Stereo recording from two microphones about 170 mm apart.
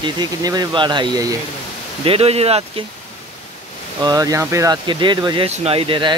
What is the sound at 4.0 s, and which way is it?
Speech, 20° right (ahead or behind).